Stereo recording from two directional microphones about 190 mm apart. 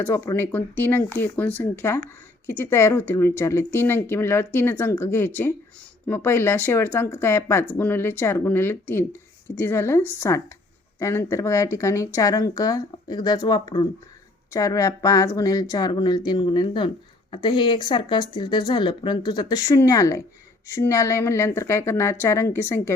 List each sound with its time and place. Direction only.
0.0 s speech: 15° left (ahead or behind)